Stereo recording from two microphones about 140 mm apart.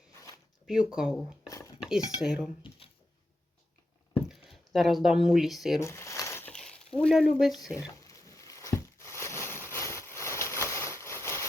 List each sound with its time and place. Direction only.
0.7 s speech: 5° right (ahead or behind)
1.5 s dishes: 25° left (ahead or behind)
1.8 s speech: 5° right (ahead or behind)
4.3 s speech: centre (ahead or behind)
5.8 s squish: 20° left (ahead or behind)
6.5 s speech: 5° left (ahead or behind)
7.7 s a sound: 25° left (ahead or behind)